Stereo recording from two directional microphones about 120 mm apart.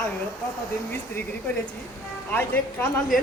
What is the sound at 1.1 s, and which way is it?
Speech, 15° left (ahead or behind).